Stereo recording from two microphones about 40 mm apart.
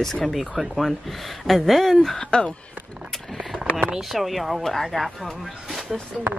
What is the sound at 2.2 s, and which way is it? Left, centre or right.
Speech, left.